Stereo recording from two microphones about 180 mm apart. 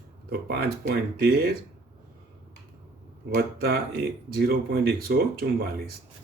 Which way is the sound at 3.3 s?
60° right (ahead or behind).